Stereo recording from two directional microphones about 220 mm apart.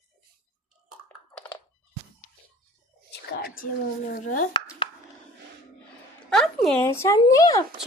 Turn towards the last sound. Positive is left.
turn(degrees=15)  # may be behind; listen again after turning